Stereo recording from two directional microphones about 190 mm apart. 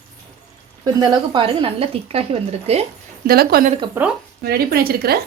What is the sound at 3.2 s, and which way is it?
Speech, 55° right (ahead or behind).